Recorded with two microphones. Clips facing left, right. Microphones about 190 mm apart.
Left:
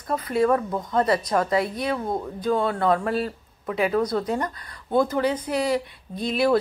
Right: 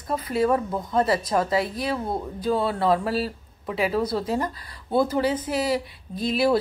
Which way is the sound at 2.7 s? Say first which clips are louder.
Even; 30° right (ahead or behind).